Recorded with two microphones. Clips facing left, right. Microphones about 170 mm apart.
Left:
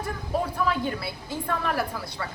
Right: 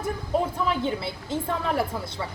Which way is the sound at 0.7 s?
25° right (ahead or behind).